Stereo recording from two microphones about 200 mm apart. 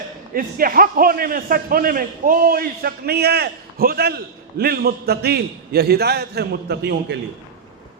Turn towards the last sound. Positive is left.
turn(degrees=-55)  # may be behind; listen again after turning